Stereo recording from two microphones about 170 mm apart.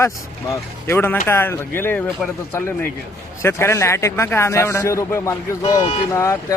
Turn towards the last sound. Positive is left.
turn(degrees=15)  # may be behind; listen again after turning